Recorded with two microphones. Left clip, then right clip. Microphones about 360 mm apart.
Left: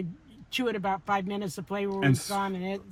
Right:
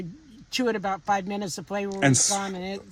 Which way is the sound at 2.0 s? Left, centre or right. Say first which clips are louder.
Right 8 dB; centre.